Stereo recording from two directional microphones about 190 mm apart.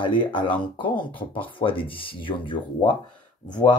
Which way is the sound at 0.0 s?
25° left (ahead or behind).